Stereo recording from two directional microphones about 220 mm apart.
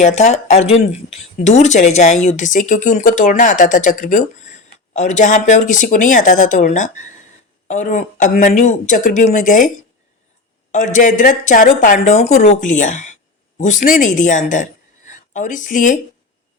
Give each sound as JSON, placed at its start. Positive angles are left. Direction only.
{"t": 0.0, "sound": "speech", "side_deg": 30}